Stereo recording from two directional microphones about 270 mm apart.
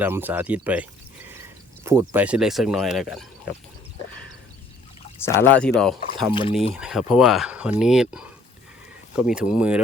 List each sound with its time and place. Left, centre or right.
0.0 s speech: centre
5.2 s speech: centre
6.3 s speech: centre
6.7 s speech: centre